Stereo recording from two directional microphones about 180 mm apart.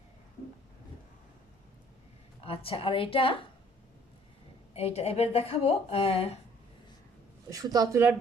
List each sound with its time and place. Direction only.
2.4 s a woman's voice: 30° left (ahead or behind)
4.7 s a woman's voice: 35° left (ahead or behind)
7.5 s a woman's voice: 20° right (ahead or behind)